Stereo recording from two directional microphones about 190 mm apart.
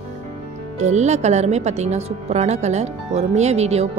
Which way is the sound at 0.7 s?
35° right (ahead or behind).